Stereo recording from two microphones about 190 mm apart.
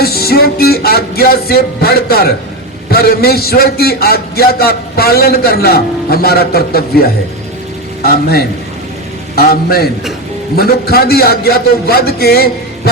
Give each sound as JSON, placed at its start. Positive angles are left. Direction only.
{"t": 0.0, "sound": "a man's voice", "side_deg": 55}